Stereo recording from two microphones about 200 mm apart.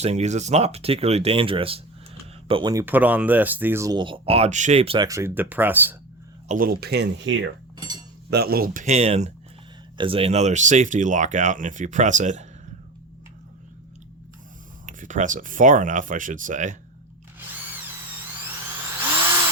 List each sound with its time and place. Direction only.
0.0 s speech: 35° right (ahead or behind)
2.8 s speech: 10° right (ahead or behind); by 5.0 s 30° right (ahead or behind)
5.0 s speech: 15° right (ahead or behind)
6.5 s speech: 45° right (ahead or behind); by 7.4 s 60° right (ahead or behind)
8.3 s speech: 50° right (ahead or behind)
14.8 s speech: 40° right (ahead or behind)